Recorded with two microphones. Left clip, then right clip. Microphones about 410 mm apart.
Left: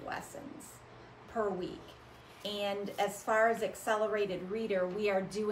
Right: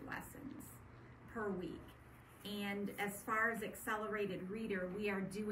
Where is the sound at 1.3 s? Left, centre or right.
Centre.